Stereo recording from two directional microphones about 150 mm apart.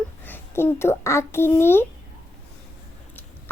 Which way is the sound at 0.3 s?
15° left (ahead or behind).